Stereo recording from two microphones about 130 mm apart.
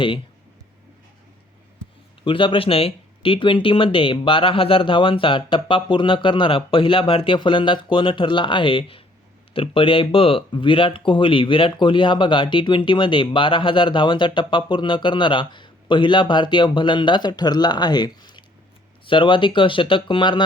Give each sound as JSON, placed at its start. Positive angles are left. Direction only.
{"t": 2.2, "sound": "speech", "side_deg": 40}